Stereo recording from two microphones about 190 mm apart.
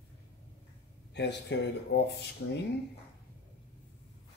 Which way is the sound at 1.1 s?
65° left (ahead or behind).